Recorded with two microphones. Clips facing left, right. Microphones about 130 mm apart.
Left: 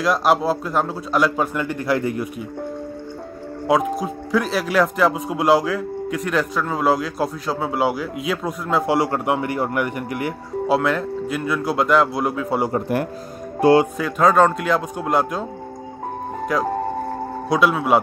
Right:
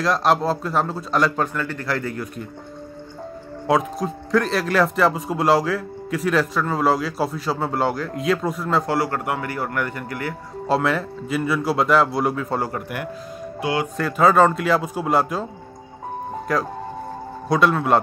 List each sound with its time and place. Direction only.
0.0 s speech: 5° left (ahead or behind)
3.6 s speech: centre (ahead or behind)
8.8 s a man's voice: 20° left (ahead or behind)
10.7 s speech: centre (ahead or behind)
12.7 s a man's voice: 35° left (ahead or behind)
13.9 s speech: centre (ahead or behind)
16.5 s speech: centre (ahead or behind)